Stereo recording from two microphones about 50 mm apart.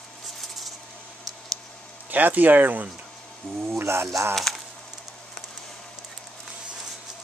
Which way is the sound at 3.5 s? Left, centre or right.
Right.